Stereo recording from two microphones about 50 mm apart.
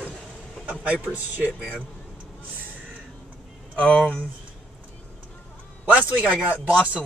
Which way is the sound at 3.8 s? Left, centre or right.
Left.